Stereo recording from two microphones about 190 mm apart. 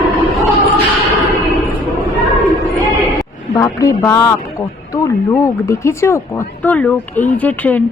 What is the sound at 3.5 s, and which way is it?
A woman's voice, 15° left (ahead or behind).